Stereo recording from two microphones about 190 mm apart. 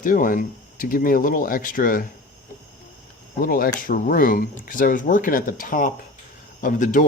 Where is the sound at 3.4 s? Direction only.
50° left (ahead or behind).